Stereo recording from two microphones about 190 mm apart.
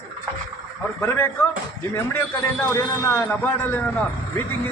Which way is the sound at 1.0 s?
10° left (ahead or behind).